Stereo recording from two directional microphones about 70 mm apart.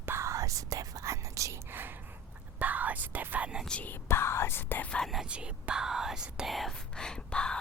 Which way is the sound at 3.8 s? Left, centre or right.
Left.